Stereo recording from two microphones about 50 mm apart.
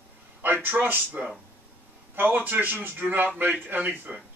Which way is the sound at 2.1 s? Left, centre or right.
Right.